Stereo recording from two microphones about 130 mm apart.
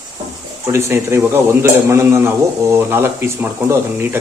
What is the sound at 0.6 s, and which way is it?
Speech, 20° right (ahead or behind).